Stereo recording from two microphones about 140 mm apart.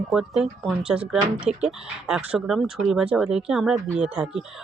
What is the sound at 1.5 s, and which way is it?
Speech, 50° right (ahead or behind).